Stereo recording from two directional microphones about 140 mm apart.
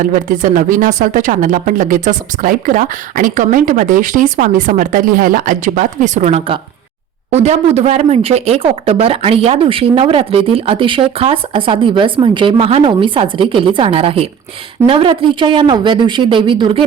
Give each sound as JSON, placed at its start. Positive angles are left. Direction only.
{"t": 0.0, "sound": "speech", "side_deg": -70}